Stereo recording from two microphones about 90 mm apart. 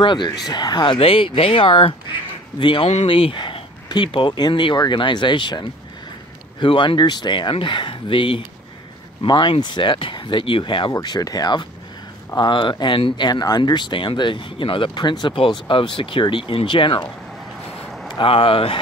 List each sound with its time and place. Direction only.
0.0 s speech: 60° left (ahead or behind)
0.9 s speech: 85° left; by 5.7 s 60° left (ahead or behind)
6.6 s speech: 70° left (ahead or behind)
10.9 s speech: 45° left (ahead or behind)
12.4 s speech: 60° left (ahead or behind)
13.3 s speech: 50° left (ahead or behind)
18.2 s speech: 90° left